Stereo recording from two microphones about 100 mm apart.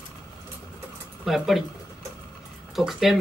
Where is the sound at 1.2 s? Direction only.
Centre (ahead or behind).